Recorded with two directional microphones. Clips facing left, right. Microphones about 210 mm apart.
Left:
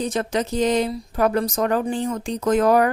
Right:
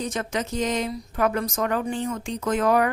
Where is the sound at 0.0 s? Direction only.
35° left (ahead or behind).